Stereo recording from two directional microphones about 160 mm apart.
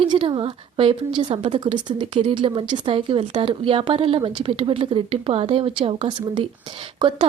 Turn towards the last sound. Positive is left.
turn(degrees=-30)  # may be behind; listen again after turning